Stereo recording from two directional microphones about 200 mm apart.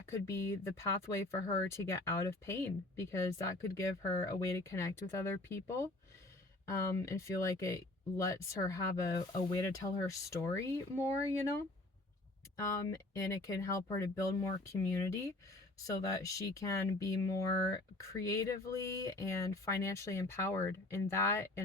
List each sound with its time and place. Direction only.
0.0 s speech: 15° left (ahead or behind)
12.5 s speech: 15° left (ahead or behind)